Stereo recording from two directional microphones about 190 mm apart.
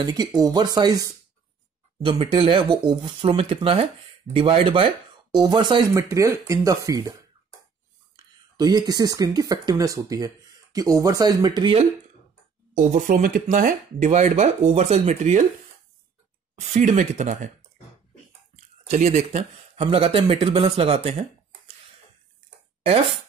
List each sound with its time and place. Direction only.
0.0 s speech: 20° right (ahead or behind)
2.0 s speech: 30° right (ahead or behind)
8.5 s speech: 20° right (ahead or behind)
12.7 s speech: 40° right (ahead or behind)
16.5 s speech: 40° right (ahead or behind)
18.9 s speech: 40° right (ahead or behind)